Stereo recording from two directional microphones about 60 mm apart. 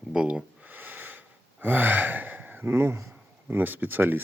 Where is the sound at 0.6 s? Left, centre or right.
Right.